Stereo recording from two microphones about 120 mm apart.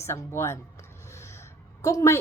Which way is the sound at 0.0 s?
20° left (ahead or behind).